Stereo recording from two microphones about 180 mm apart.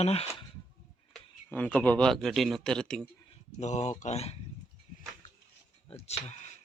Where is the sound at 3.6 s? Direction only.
40° left (ahead or behind).